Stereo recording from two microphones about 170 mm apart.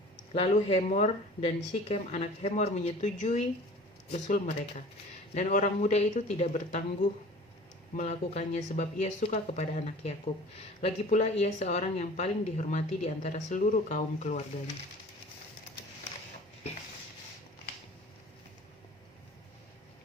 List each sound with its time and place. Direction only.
0.3 s speech: 35° left (ahead or behind)